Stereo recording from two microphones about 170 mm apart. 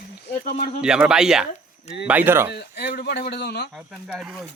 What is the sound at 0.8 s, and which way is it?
Speech, 5° right (ahead or behind).